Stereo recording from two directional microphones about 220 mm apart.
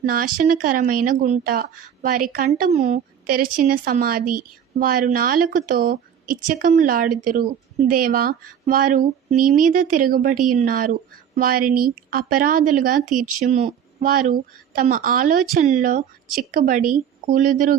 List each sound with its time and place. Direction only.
0.0 s speech: 40° right (ahead or behind)